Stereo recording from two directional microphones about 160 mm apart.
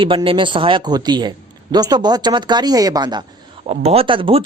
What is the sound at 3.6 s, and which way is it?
Speech, 40° right (ahead or behind).